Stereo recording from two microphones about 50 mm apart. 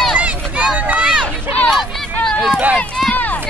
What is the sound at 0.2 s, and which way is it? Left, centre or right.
Run, right.